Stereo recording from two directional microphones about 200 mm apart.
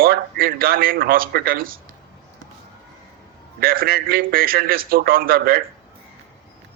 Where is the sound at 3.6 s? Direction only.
50° right (ahead or behind).